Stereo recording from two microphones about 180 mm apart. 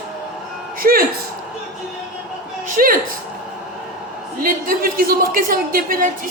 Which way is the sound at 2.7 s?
50° right (ahead or behind).